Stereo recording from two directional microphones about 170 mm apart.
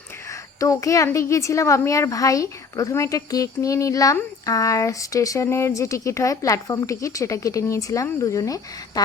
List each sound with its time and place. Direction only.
0.3 s a woman's voice: 20° left (ahead or behind)